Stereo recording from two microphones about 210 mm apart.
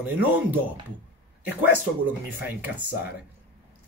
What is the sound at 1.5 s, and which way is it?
Speech, 10° right (ahead or behind).